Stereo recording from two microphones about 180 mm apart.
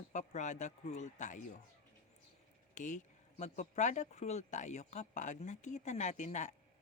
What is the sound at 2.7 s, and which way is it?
Speech, 45° left (ahead or behind).